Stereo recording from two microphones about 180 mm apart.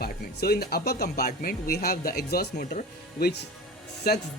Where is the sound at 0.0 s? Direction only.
60° left (ahead or behind).